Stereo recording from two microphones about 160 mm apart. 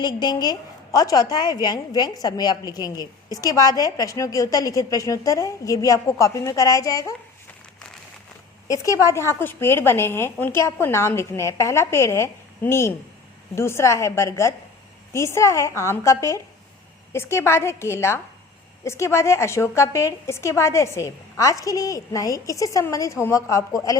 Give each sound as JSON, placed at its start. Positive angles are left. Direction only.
{"t": 0.0, "sound": "a woman's voice", "side_deg": 25}
{"t": 8.6, "sound": "a woman's voice", "side_deg": 20}